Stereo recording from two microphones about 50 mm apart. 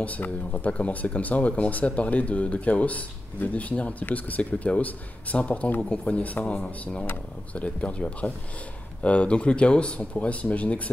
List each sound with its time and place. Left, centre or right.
0.0 s speech: left